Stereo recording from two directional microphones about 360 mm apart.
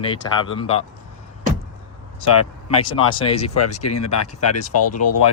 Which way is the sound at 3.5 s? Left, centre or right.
Left.